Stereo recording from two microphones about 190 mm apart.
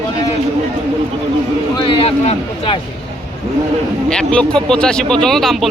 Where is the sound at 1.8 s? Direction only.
30° left (ahead or behind).